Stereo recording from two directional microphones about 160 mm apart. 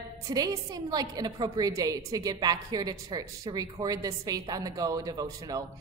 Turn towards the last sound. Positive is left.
turn(degrees=-25)  # may be behind; listen again after turning